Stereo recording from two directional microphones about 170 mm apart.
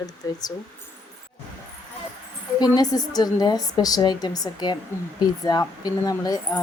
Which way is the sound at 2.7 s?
20° left (ahead or behind).